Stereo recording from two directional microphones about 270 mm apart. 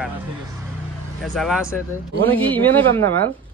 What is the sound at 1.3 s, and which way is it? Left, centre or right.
Speech, centre.